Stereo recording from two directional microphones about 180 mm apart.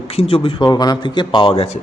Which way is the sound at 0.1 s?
35° left (ahead or behind).